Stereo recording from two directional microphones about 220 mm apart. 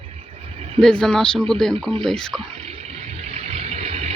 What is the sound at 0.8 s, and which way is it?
Speech, 5° left (ahead or behind).